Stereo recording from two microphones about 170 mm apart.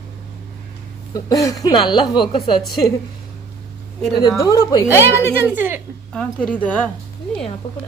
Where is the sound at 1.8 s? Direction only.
Centre (ahead or behind).